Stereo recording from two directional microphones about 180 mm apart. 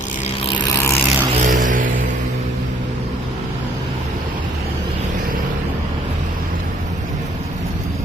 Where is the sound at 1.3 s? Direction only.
45° right (ahead or behind).